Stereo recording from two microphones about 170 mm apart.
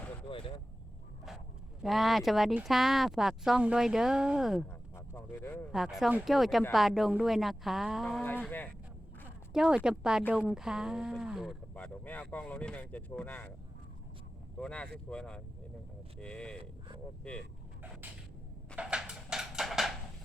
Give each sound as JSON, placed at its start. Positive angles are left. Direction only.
{"t": 0.3, "sound": "a sound", "side_deg": 30}
{"t": 1.8, "sound": "speech", "side_deg": 0}
{"t": 4.9, "sound": "a sound", "side_deg": 15}
{"t": 5.7, "sound": "speech", "side_deg": 0}
{"t": 9.5, "sound": "speech", "side_deg": -5}
{"t": 11.7, "sound": "speech", "side_deg": 10}
{"t": 14.6, "sound": "speech", "side_deg": 5}
{"t": 18.8, "sound": "music", "side_deg": -5}